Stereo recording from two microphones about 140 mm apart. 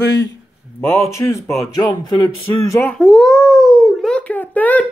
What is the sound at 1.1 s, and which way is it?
Speech, 20° left (ahead or behind).